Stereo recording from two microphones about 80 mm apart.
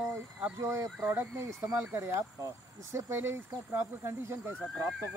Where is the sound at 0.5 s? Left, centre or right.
Right.